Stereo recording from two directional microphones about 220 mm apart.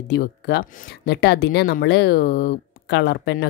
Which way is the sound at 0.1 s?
50° left (ahead or behind).